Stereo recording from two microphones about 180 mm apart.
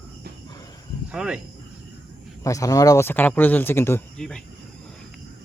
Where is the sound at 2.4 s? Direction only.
20° left (ahead or behind).